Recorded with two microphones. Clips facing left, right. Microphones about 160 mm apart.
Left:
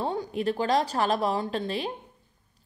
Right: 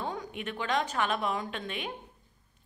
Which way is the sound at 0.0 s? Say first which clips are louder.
Left 8 dB; 35° left (ahead or behind).